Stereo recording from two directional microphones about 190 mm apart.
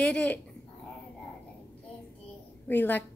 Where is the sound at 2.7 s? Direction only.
10° left (ahead or behind).